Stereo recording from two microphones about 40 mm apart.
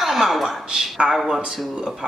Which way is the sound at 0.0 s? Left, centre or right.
Centre.